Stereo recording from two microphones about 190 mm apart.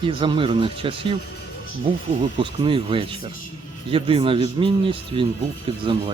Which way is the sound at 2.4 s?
25° right (ahead or behind).